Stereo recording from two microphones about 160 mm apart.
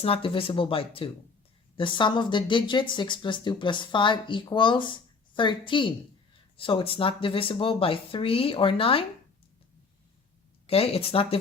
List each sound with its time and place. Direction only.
0.0 s speech: 35° left (ahead or behind)
10.7 s speech: 35° left (ahead or behind)